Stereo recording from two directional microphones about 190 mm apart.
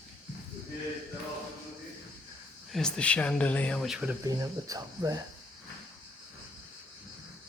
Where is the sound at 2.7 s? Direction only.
5° left (ahead or behind).